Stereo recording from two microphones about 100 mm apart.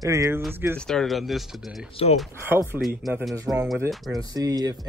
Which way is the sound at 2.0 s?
80° left.